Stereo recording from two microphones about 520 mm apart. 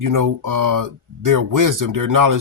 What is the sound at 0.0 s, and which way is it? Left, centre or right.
Speech, right.